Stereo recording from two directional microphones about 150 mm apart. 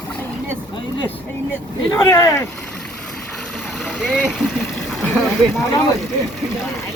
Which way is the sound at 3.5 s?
Centre (ahead or behind).